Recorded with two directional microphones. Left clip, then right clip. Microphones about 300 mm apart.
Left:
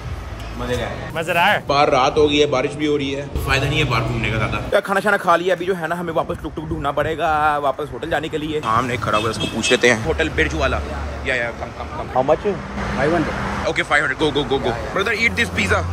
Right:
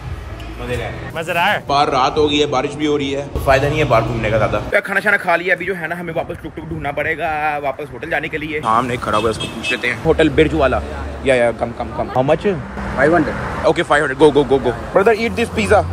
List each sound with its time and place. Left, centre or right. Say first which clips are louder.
1.1 s a man's voice: even; centre
6.8 s speech: even; centre
8.6 s a man's voice: right 4 dB; centre
9.7 s speech: left 4 dB; centre
10.0 s speech: right 6 dB; centre
12.2 s speech: right 1 dB; right
13.7 s a man's voice: right 4 dB; centre